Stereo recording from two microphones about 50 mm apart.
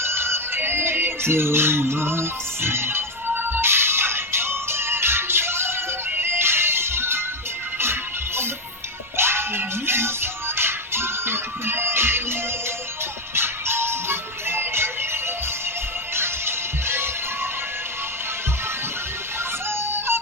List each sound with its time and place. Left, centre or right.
0.0 s music: right
9.1 s music: right
19.7 s music: right